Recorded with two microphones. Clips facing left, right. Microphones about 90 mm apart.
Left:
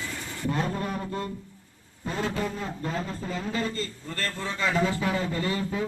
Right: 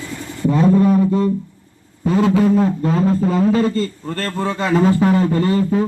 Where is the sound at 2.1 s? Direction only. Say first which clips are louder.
Right 15 dB; 90° right.